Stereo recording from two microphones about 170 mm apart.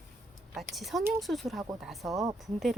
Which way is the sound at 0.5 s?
Centre (ahead or behind).